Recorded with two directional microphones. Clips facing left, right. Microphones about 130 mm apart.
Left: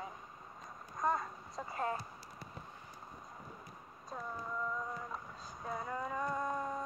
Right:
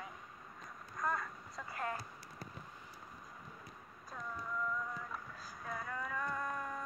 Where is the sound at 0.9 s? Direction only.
25° left (ahead or behind).